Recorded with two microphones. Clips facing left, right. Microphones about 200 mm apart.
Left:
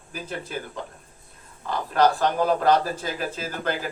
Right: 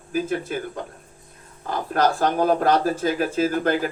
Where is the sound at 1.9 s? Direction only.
45° right (ahead or behind).